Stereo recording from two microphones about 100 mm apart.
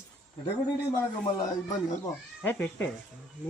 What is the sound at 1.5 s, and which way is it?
Speech, 35° left (ahead or behind).